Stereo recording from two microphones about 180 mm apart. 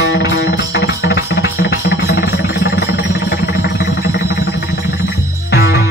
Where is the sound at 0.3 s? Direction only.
90° left.